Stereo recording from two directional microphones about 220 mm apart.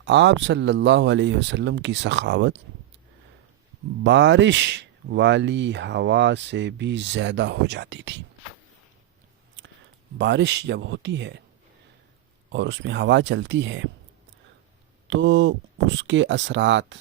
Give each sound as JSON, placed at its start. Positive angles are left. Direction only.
{"t": 0.0, "sound": "speech", "side_deg": -55}
{"t": 4.0, "sound": "speech", "side_deg": -55}
{"t": 9.6, "sound": "a sound", "side_deg": -55}
{"t": 10.2, "sound": "speech", "side_deg": -50}
{"t": 12.5, "sound": "speech", "side_deg": -55}
{"t": 15.0, "sound": "speech", "side_deg": -55}